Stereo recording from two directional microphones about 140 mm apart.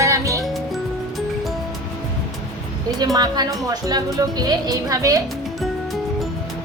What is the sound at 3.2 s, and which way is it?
Speech, 30° right (ahead or behind).